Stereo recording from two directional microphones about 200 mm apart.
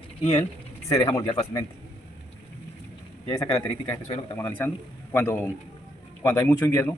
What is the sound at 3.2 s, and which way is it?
Speech, 20° left (ahead or behind).